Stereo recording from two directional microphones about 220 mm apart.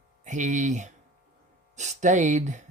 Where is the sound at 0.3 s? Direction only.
35° right (ahead or behind).